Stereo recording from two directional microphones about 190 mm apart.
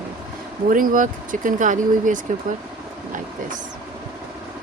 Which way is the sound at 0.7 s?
45° right (ahead or behind).